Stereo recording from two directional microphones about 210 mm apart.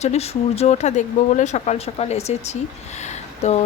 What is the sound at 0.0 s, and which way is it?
Speech, 30° left (ahead or behind).